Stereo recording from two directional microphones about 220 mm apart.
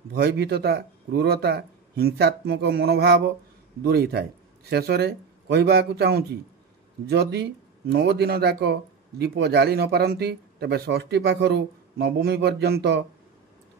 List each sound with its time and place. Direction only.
0.1 s a man's voice: 50° right (ahead or behind)